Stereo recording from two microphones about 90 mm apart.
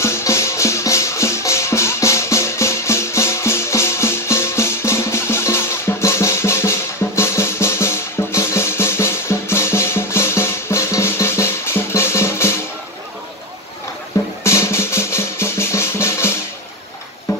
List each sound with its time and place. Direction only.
0.0 s music: 30° left (ahead or behind)
14.4 s drum: 30° left (ahead or behind)